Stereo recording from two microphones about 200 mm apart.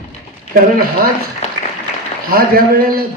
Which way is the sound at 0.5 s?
45° right (ahead or behind).